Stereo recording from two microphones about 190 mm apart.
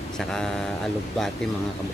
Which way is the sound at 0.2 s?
5° left (ahead or behind).